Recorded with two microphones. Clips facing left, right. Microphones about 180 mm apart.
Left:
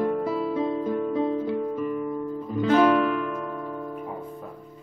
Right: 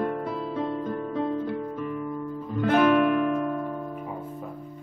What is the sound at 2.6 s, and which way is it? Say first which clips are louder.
Music: left 1 dB; 60° right (ahead or behind).